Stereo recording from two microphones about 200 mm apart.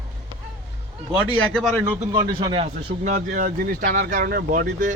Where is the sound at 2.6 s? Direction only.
35° right (ahead or behind).